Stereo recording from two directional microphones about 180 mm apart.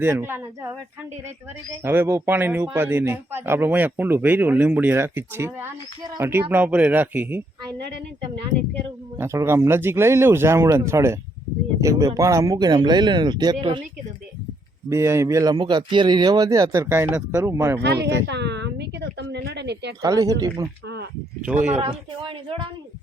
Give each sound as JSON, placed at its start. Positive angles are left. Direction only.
{"t": 0.0, "sound": "speech", "side_deg": -15}
{"t": 1.7, "sound": "speech", "side_deg": -10}
{"t": 9.1, "sound": "speech", "side_deg": -15}
{"t": 14.8, "sound": "speech", "side_deg": -15}
{"t": 17.8, "sound": "a sound", "side_deg": -70}
{"t": 20.0, "sound": "speech", "side_deg": -20}
{"t": 21.4, "sound": "speech", "side_deg": -5}
{"t": 21.8, "sound": "speech", "side_deg": -30}